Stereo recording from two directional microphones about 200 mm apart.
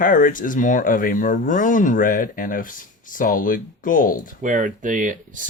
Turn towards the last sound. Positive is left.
turn(degrees=-40)  # may be behind; listen again after turning